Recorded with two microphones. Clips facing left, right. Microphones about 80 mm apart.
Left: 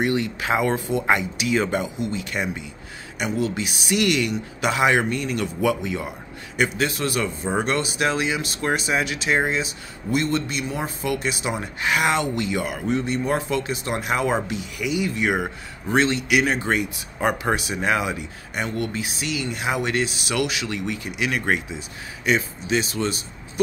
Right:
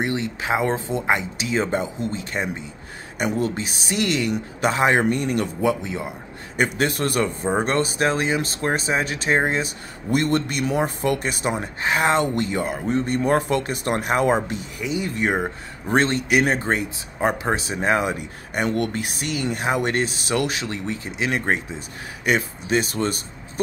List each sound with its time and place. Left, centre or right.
0.0 s speech: right
5.6 s speech: right
6.5 s speech: right
11.8 s speech: right
13.0 s speech: right
15.9 s speech: right